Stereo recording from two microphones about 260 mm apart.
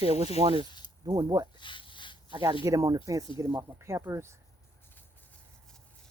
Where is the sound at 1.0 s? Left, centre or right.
Centre.